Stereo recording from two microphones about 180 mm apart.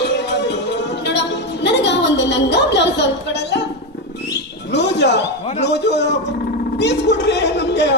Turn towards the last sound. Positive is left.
turn(degrees=70)  # may be behind; listen again after turning